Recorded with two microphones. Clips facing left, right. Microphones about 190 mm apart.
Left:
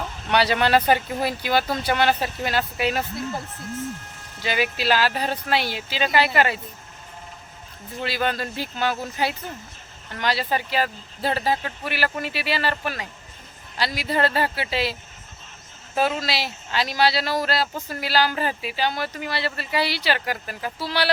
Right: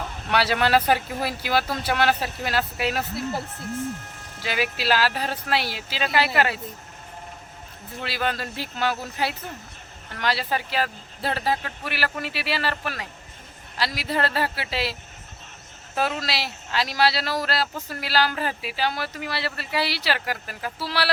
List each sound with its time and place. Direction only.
0.3 s speech: 5° right (ahead or behind)
4.4 s speech: centre (ahead or behind)
8.0 s speech: centre (ahead or behind)
16.0 s speech: centre (ahead or behind)